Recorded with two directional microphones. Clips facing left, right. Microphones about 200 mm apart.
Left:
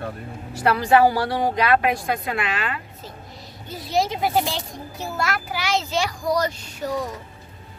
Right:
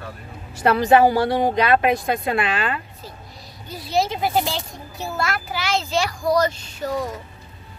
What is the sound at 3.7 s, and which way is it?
A child's voice, 20° left (ahead or behind).